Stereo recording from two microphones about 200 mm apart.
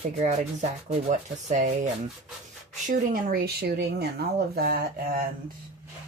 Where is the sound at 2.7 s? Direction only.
40° right (ahead or behind).